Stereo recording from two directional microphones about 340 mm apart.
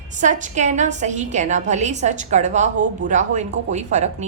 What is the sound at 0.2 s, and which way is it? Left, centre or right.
A woman's voice, right.